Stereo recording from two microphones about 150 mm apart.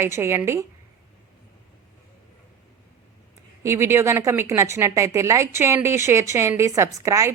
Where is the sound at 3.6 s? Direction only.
20° right (ahead or behind).